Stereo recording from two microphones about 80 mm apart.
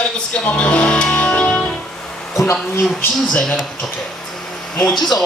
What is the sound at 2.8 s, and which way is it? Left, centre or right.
Speech, centre.